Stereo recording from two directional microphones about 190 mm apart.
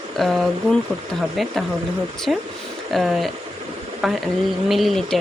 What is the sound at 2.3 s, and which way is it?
Speech, 5° right (ahead or behind).